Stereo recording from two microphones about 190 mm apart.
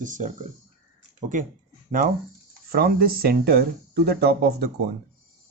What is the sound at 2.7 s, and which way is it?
Speech, 55° right (ahead or behind).